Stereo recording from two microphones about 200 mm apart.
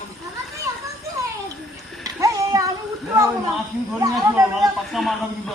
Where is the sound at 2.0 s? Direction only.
15° right (ahead or behind).